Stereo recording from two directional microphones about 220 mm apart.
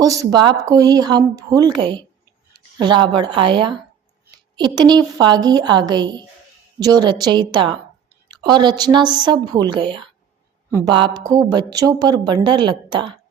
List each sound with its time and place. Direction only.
0.0 s speech: 15° right (ahead or behind)